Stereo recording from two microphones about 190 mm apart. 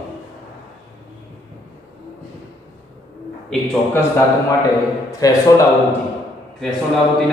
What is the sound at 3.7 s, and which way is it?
Speech, 10° left (ahead or behind).